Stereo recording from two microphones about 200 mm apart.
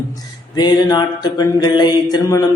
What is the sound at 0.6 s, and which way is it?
Mantra, 20° left (ahead or behind).